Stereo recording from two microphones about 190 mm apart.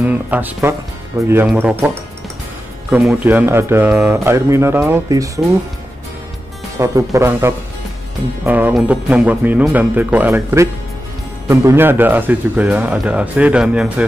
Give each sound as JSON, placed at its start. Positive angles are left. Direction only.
{"t": 0.0, "sound": "speech", "side_deg": -10}
{"t": 2.9, "sound": "speech", "side_deg": -5}
{"t": 6.8, "sound": "speech", "side_deg": -15}